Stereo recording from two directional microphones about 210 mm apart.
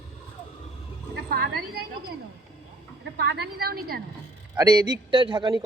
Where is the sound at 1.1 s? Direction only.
50° right (ahead or behind).